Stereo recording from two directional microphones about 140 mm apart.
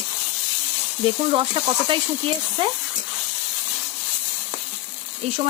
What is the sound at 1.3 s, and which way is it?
Speech, 35° right (ahead or behind).